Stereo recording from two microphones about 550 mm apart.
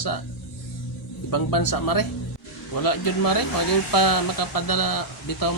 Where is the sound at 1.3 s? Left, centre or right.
Left.